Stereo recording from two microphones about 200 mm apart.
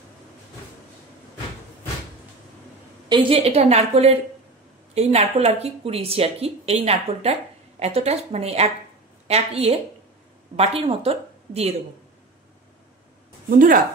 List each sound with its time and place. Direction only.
3.1 s a woman's voice: 25° right (ahead or behind)
13.5 s speech: 45° right (ahead or behind)